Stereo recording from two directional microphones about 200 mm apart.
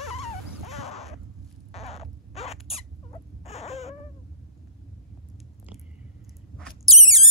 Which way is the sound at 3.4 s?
30° left (ahead or behind).